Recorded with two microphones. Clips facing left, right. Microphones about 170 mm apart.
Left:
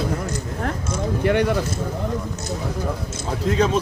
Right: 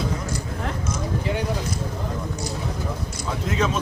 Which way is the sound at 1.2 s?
65° left (ahead or behind).